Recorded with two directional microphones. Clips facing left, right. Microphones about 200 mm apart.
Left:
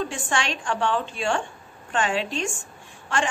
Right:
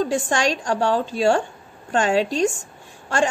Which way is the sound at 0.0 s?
40° right (ahead or behind).